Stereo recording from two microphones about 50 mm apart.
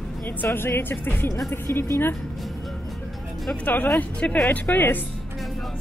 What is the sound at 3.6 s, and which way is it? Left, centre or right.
Speech, left.